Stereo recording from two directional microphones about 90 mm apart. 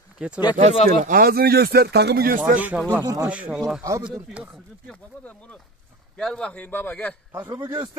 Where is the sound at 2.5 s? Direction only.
15° right (ahead or behind).